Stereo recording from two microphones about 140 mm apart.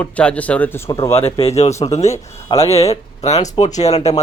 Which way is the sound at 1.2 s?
45° left (ahead or behind).